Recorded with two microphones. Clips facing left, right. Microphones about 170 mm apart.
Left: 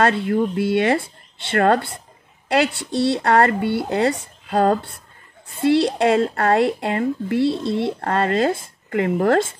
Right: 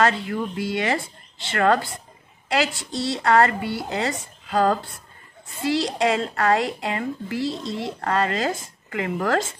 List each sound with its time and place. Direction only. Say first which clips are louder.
0.0 s a woman's voice: left 4 dB; 55° left (ahead or behind)
5.5 s a woman's voice: left 7 dB; 60° left (ahead or behind)
8.0 s speech: left 2 dB; 50° left (ahead or behind)